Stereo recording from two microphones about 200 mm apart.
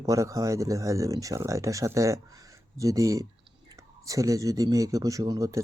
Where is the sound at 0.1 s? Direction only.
15° right (ahead or behind).